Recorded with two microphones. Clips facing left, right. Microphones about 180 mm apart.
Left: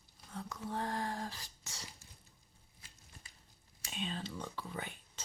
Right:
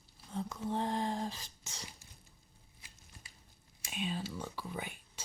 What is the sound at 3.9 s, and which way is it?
Whispering, 10° right (ahead or behind).